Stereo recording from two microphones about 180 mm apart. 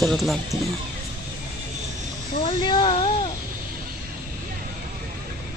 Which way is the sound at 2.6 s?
25° left (ahead or behind).